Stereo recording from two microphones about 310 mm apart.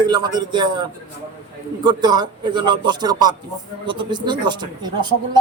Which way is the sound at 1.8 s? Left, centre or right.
Centre.